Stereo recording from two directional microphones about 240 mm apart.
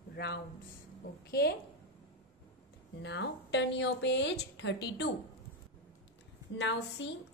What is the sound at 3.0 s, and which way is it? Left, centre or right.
A woman's voice, left.